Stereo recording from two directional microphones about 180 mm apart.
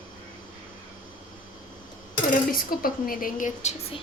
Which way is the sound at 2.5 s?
50° left (ahead or behind).